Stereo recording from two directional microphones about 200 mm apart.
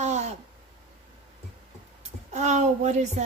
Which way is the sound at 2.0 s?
35° right (ahead or behind).